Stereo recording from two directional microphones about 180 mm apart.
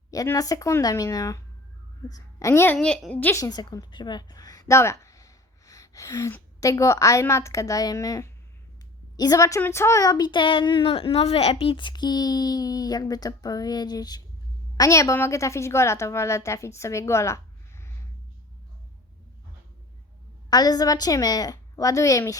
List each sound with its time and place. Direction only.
0.1 s a child's voice: 20° left (ahead or behind)
2.7 s a woman's voice: 5° left (ahead or behind)
20.5 s a child's voice: 20° left (ahead or behind)